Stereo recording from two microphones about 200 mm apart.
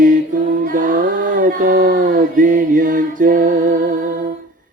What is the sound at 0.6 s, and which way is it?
Music, 45° right (ahead or behind).